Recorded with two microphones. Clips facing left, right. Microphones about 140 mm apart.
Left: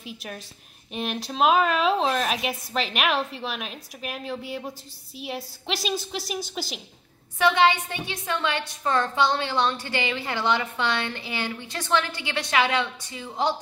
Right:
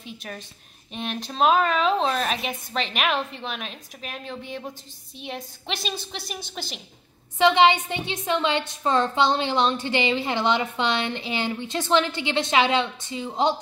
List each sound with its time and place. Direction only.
0.0 s a woman's voice: 5° left (ahead or behind)
7.3 s a woman's voice: 20° right (ahead or behind)